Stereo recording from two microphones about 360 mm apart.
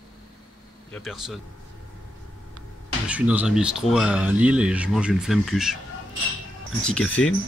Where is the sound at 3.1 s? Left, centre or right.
Centre.